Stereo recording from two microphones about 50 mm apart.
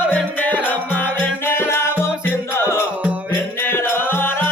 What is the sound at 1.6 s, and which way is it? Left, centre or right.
Music, left.